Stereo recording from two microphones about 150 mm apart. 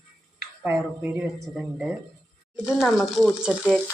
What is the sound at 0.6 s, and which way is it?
Frying, 15° right (ahead or behind).